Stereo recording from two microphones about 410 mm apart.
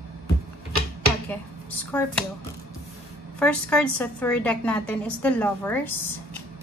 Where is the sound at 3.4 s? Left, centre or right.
Centre.